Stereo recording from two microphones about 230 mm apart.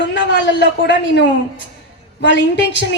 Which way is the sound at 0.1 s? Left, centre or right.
Left.